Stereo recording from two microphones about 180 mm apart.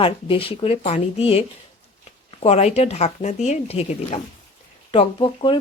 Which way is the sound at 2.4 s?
35° left (ahead or behind).